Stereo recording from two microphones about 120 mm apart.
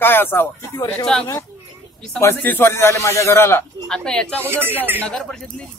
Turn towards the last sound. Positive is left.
turn(degrees=5)  # may be behind; listen again after turning